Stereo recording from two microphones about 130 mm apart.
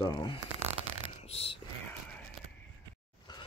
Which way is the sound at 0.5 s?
55° right (ahead or behind).